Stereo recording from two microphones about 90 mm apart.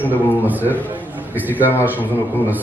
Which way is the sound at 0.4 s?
20° right (ahead or behind).